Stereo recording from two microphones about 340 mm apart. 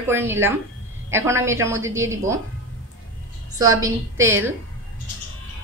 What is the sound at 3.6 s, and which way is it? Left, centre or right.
Speech, centre.